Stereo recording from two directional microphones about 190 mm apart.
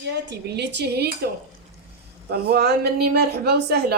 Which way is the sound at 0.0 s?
65° right (ahead or behind).